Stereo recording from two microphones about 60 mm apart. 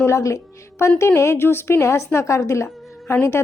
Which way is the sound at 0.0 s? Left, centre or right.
Left.